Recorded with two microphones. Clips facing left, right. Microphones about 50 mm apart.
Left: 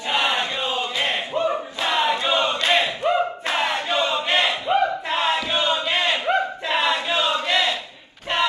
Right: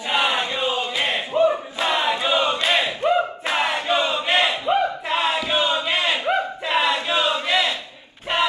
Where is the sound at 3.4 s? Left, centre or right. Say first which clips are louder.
Right 1 dB; centre.